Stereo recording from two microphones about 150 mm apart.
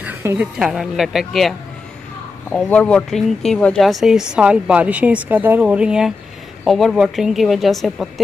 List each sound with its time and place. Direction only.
0.0 s a sound: 15° right (ahead or behind)
0.6 s speech: 5° right (ahead or behind)
2.5 s speech: 10° left (ahead or behind)